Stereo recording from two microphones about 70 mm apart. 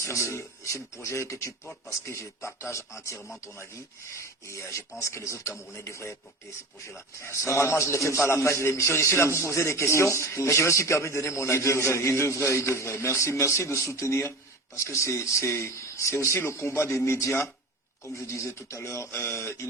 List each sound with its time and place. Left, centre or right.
0.0 s speech: left
7.3 s a man's voice: left